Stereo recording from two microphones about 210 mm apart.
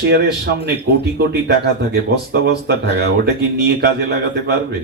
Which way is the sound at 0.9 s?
70° right (ahead or behind).